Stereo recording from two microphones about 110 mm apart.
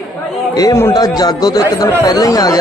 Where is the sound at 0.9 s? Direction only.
35° left (ahead or behind).